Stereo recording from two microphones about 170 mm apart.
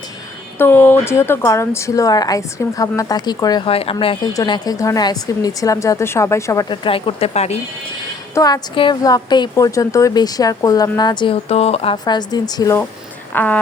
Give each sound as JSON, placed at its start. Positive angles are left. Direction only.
{"t": 0.6, "sound": "a woman's voice", "side_deg": 10}
{"t": 6.7, "sound": "speech", "side_deg": 30}
{"t": 8.4, "sound": "a woman's voice", "side_deg": 20}
{"t": 13.3, "sound": "speech", "side_deg": 10}